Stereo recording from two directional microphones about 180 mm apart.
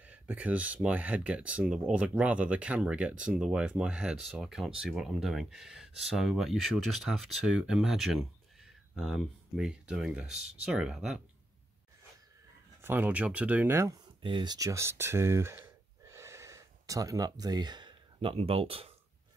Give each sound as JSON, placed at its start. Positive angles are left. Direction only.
{"t": 0.0, "sound": "speech", "side_deg": -10}
{"t": 12.8, "sound": "speech", "side_deg": -10}
{"t": 14.2, "sound": "speech", "side_deg": -25}